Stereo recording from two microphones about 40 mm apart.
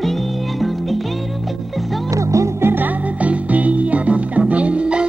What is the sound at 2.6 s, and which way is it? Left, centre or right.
Music, right.